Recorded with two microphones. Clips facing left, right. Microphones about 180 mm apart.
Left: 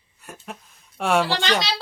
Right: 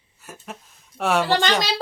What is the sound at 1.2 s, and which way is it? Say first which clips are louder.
Child singing: right 3 dB; 45° right (ahead or behind).